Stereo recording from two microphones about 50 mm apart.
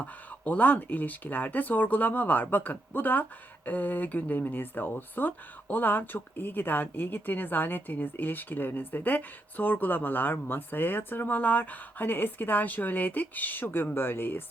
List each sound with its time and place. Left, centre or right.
0.0 s speech: left